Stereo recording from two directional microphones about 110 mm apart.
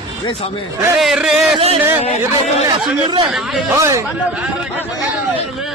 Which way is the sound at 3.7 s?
25° right (ahead or behind).